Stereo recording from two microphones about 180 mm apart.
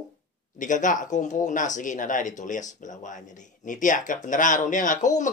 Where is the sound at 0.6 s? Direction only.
45° left (ahead or behind).